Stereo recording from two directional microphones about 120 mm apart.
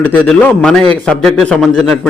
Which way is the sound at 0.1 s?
10° left (ahead or behind).